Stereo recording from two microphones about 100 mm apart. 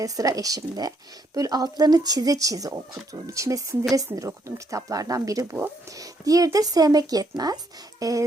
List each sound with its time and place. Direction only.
0.0 s speech: 35° right (ahead or behind)